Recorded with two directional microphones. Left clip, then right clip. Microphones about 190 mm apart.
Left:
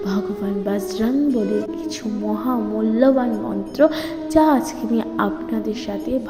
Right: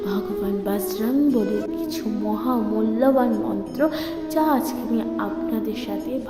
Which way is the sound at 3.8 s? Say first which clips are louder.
Left 7 dB; 20° left (ahead or behind).